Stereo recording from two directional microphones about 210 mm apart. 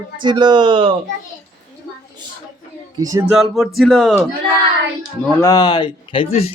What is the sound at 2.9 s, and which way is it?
Speech, 15° right (ahead or behind).